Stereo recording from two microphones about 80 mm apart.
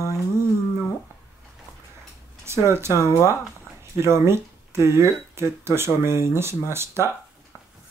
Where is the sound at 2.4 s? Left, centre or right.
Right.